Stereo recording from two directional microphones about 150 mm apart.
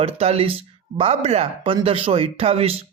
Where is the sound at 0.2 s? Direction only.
40° right (ahead or behind).